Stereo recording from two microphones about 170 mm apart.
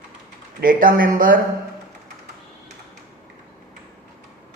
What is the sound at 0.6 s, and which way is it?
Speech, 55° right (ahead or behind).